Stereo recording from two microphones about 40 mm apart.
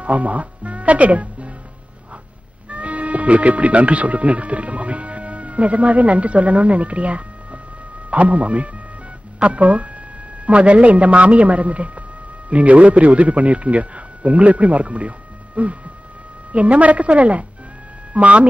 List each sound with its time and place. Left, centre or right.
0.0 s speech: right
2.7 s a man's voice: right